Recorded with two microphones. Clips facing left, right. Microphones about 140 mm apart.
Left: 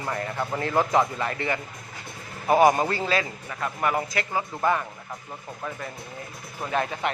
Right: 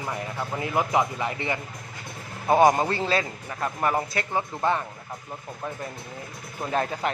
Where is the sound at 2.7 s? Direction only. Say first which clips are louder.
Even; 25° right (ahead or behind).